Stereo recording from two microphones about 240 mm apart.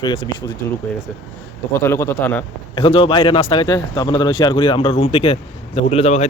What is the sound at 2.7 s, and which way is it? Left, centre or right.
Speech, left.